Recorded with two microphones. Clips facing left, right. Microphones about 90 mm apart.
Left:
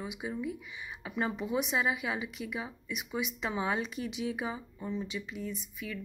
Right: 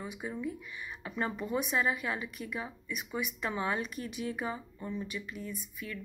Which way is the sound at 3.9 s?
90° left.